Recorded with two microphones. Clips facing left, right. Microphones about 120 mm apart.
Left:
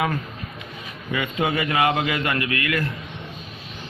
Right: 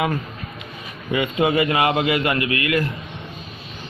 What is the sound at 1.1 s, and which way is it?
Speech, 20° right (ahead or behind).